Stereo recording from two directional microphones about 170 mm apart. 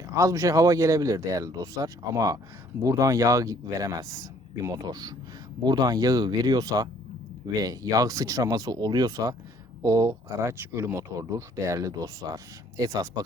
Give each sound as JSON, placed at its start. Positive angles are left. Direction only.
{"t": 0.0, "sound": "speech", "side_deg": -20}